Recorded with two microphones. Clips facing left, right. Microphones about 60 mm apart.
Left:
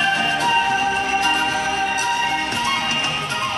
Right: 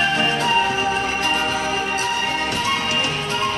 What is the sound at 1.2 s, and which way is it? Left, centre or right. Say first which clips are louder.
Music: left 1 dB; left.